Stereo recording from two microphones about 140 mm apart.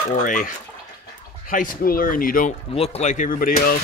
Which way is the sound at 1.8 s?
90° left.